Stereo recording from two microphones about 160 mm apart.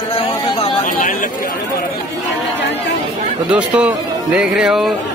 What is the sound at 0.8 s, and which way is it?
Speech, 55° left (ahead or behind).